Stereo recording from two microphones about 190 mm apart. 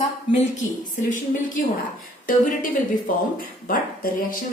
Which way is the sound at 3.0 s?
50° left (ahead or behind).